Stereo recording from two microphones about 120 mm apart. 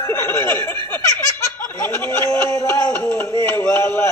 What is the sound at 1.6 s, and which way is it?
Speech, 15° left (ahead or behind).